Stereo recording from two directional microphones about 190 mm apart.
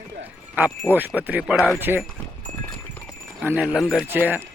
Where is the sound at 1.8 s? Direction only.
10° right (ahead or behind).